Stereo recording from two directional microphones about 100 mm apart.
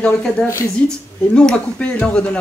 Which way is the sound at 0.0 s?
5° left (ahead or behind).